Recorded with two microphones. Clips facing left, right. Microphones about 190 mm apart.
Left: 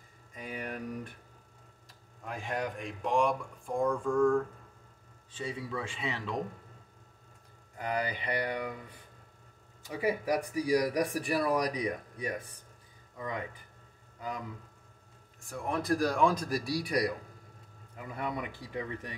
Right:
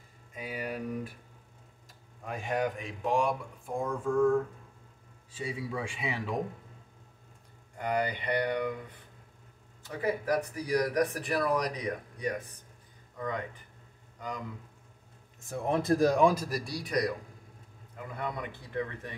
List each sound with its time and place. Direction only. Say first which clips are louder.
0.3 s speech: right 2 dB; 5° right (ahead or behind)
2.2 s speech: right 4 dB; centre (ahead or behind)
7.7 s speech: right 3 dB; 5° left (ahead or behind)
9.8 s speech: even; 10° left (ahead or behind)
15.4 s speech: right 4 dB; 25° right (ahead or behind)
16.4 s speech: left 3 dB; 5° left (ahead or behind)
18.1 s speech: left 1 dB; 10° left (ahead or behind)